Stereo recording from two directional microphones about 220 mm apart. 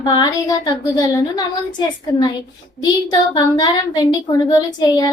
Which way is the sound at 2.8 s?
15° left (ahead or behind).